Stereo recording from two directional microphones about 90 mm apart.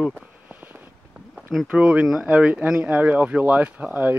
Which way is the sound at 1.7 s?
10° right (ahead or behind).